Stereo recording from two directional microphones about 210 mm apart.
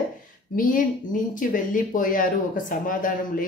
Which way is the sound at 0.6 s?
40° left (ahead or behind).